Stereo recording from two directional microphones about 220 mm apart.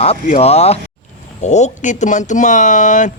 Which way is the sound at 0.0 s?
30° left (ahead or behind).